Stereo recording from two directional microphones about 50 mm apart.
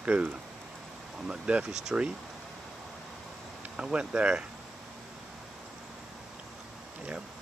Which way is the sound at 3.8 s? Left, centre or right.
Centre.